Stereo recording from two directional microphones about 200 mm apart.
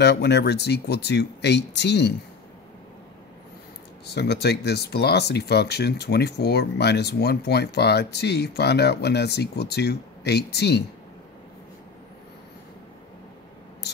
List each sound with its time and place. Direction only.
0.0 s speech: 55° left (ahead or behind)
4.0 s speech: 55° left (ahead or behind)